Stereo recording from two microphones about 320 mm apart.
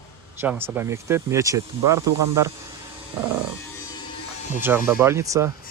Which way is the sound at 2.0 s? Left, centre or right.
Right.